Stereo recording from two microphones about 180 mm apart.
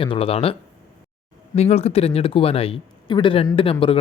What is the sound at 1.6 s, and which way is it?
Speech, 35° left (ahead or behind).